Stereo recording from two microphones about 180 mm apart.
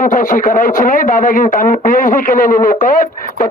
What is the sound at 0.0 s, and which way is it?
Speech, 50° left (ahead or behind).